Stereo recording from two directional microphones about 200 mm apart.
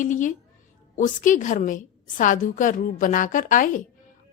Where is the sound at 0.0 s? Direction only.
40° left (ahead or behind).